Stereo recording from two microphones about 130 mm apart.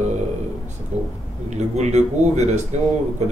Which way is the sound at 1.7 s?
60° right (ahead or behind).